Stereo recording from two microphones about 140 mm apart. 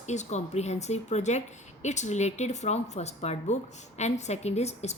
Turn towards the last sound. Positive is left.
turn(degrees=50)  # may be behind; listen again after turning